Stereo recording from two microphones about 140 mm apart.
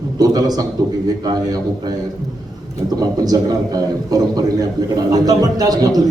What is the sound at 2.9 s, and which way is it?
A man's voice, 25° right (ahead or behind).